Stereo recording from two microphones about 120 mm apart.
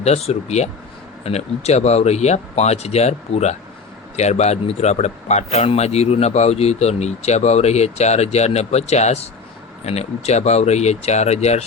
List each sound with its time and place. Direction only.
0.0 s a man's voice: 60° left (ahead or behind)